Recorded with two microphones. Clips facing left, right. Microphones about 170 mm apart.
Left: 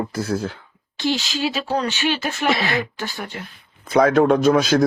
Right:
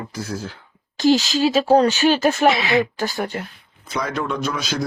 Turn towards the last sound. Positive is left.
turn(degrees=50)  # may be behind; listen again after turning